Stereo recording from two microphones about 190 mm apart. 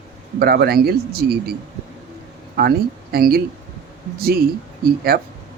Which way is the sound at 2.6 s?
55° right (ahead or behind).